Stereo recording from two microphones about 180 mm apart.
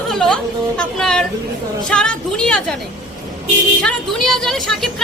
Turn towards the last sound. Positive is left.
turn(degrees=0)  # may be behind; listen again after turning